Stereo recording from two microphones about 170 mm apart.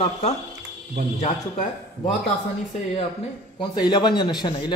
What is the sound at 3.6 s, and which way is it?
A man's voice, 25° left (ahead or behind).